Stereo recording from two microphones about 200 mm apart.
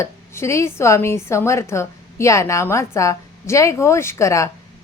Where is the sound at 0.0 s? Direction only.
15° left (ahead or behind).